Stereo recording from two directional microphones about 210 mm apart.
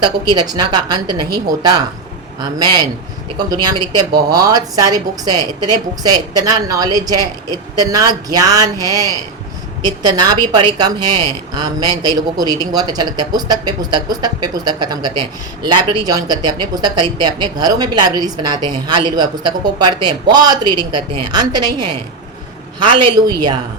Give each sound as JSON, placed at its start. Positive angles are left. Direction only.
{"t": 0.0, "sound": "a man's voice", "side_deg": -20}
{"t": 3.3, "sound": "a man's voice", "side_deg": -20}